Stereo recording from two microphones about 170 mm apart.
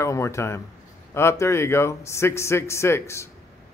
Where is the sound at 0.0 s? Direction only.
15° left (ahead or behind).